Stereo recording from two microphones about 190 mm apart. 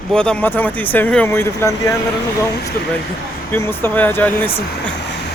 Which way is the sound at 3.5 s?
10° left (ahead or behind).